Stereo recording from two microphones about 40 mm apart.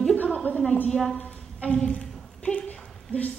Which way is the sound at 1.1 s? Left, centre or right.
Left.